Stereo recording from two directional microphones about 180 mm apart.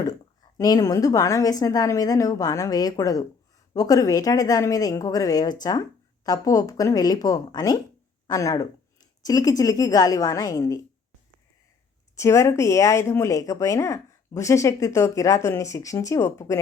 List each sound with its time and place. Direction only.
0.0 s a woman's voice: 20° left (ahead or behind)
12.1 s speech: 15° left (ahead or behind)